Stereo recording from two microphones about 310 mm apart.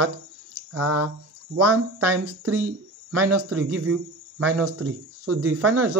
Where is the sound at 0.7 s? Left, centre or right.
Right.